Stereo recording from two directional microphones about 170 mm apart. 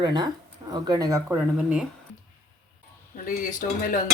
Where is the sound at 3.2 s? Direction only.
50° left (ahead or behind).